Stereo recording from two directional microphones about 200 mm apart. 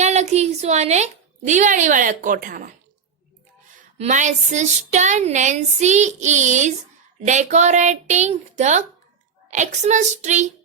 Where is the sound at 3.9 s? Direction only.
35° right (ahead or behind).